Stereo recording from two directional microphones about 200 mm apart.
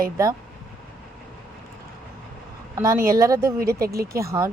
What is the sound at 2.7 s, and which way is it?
Speech, 15° right (ahead or behind).